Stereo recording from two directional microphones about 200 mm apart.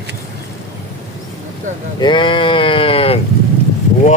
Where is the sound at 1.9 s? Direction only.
25° left (ahead or behind).